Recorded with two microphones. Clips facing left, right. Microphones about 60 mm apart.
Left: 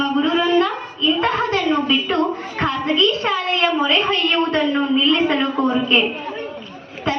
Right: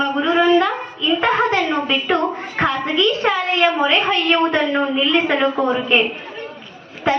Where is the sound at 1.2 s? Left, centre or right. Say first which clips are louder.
Right 6 dB; right.